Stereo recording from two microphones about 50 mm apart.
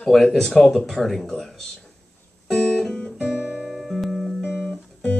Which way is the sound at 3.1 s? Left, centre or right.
Right.